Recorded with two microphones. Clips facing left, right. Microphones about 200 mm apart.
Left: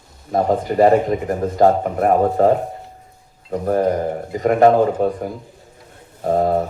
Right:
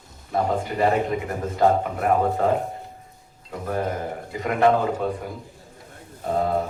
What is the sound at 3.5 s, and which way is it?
A man's voice, 40° left (ahead or behind).